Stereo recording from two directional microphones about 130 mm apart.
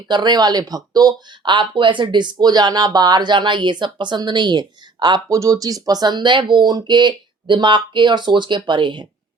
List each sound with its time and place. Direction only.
0.1 s speech: 35° right (ahead or behind)